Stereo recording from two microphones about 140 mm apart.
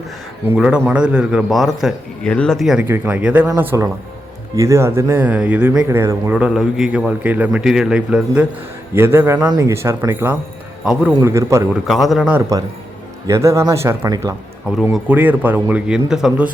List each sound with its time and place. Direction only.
0.5 s speech: 10° right (ahead or behind)
2.8 s speech: 15° right (ahead or behind)
9.0 s speech: 15° right (ahead or behind)
11.7 s speech: centre (ahead or behind)
12.3 s speech: 20° right (ahead or behind); by 16.5 s 5° right (ahead or behind)